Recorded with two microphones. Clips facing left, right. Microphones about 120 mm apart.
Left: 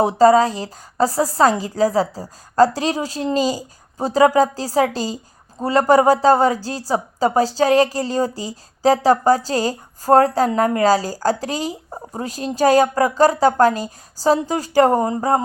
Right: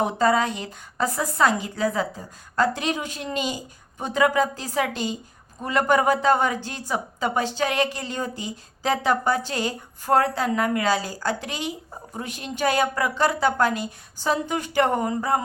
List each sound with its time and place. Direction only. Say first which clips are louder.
0.0 s a woman's voice: left 8 dB; 35° left (ahead or behind)